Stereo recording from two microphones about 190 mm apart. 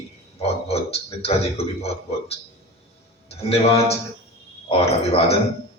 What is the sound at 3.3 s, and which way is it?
A man's voice, 30° left (ahead or behind).